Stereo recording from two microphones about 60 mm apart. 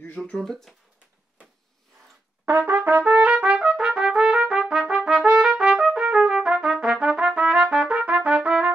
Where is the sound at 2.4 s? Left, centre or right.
Right.